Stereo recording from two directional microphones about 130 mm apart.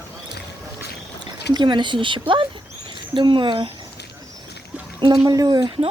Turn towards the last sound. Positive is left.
turn(degrees=-30)  # may be behind; listen again after turning